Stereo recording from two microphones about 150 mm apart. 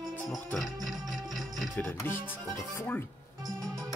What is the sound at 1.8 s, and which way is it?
Speech, 15° left (ahead or behind).